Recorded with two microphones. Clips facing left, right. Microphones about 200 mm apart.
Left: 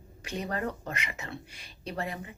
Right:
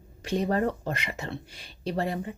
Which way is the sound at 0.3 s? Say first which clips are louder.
Right 7 dB; 30° right (ahead or behind).